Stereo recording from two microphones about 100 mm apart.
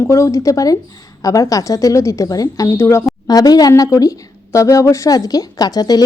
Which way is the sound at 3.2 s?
40° left (ahead or behind).